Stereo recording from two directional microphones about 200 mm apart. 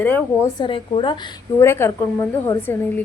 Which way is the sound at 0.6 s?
25° left (ahead or behind).